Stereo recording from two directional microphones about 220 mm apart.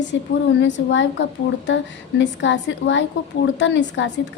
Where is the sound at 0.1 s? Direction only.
55° left (ahead or behind).